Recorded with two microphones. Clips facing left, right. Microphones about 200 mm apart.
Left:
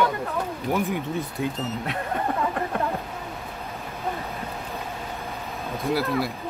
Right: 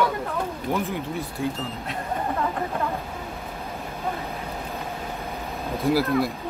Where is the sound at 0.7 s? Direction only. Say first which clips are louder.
Left 2 dB; 15° left (ahead or behind).